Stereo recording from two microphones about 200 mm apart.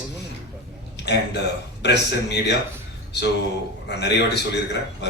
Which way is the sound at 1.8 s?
60° left (ahead or behind).